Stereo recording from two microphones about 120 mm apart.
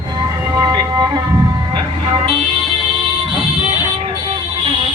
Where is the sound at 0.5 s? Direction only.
35° right (ahead or behind).